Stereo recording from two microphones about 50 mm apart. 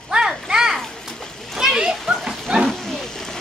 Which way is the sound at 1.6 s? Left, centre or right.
Centre.